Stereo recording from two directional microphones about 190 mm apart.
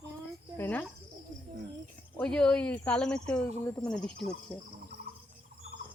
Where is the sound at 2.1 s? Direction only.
5° left (ahead or behind).